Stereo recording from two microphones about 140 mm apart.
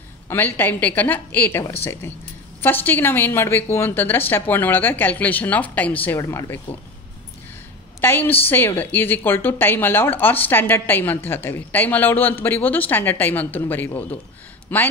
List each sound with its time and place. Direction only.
0.3 s a woman's voice: 15° left (ahead or behind)
8.0 s a woman's voice: 15° left (ahead or behind)